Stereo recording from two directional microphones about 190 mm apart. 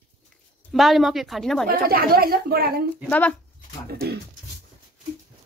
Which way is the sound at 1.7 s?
50° right (ahead or behind).